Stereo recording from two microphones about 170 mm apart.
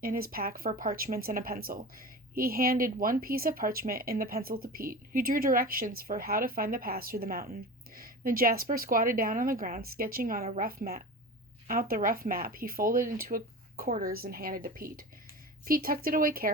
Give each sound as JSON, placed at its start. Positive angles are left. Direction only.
{"t": 0.0, "sound": "speech", "side_deg": -55}